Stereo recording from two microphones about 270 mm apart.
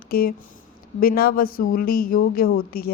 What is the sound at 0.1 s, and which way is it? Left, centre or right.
Speech, left.